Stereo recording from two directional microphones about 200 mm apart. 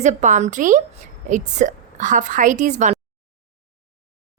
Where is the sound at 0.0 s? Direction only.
40° right (ahead or behind).